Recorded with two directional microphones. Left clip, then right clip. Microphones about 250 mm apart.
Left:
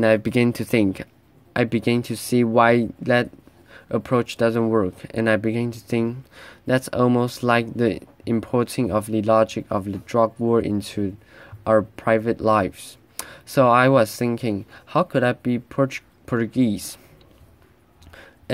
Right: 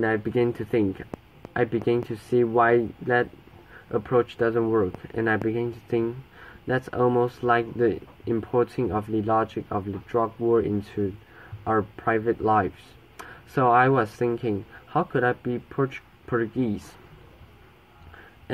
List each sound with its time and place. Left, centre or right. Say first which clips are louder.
0.0 s speech: left 5 dB; left